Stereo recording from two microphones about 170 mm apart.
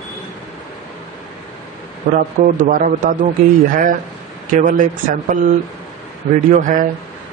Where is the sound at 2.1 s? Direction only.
60° right (ahead or behind).